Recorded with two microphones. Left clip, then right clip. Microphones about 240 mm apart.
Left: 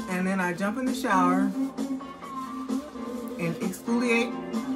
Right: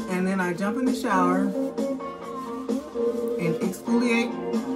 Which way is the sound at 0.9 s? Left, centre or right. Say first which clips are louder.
Even; centre.